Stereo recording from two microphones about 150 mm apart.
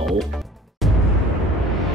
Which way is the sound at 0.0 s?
Centre (ahead or behind).